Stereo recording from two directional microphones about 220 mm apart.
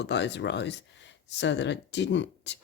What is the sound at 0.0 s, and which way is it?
Speech, 50° left (ahead or behind).